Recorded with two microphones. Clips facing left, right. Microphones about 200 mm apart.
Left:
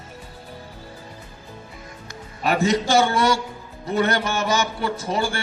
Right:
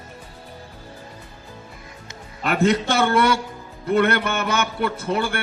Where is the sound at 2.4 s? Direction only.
60° right (ahead or behind).